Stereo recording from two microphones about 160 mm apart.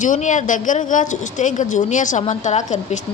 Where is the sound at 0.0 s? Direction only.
50° left (ahead or behind).